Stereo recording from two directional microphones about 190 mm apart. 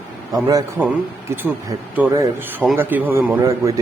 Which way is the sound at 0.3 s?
20° right (ahead or behind).